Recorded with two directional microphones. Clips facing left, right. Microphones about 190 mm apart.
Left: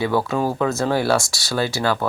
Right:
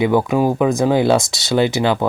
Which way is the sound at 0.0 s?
15° right (ahead or behind).